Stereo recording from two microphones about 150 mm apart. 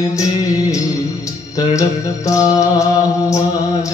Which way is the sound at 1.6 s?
20° left (ahead or behind).